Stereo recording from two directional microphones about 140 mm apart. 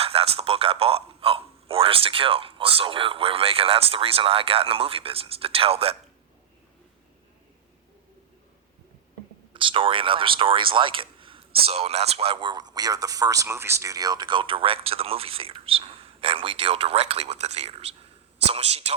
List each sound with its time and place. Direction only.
0.0 s a man's voice: 45° right (ahead or behind)
9.5 s a man's voice: 35° right (ahead or behind)